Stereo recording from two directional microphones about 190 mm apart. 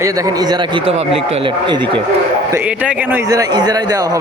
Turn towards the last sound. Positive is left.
turn(degrees=-20)  # may be behind; listen again after turning